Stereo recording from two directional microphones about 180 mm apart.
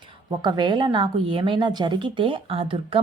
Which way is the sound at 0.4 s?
25° right (ahead or behind).